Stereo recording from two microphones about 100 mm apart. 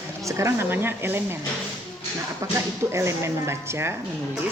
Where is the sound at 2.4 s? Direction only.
30° right (ahead or behind).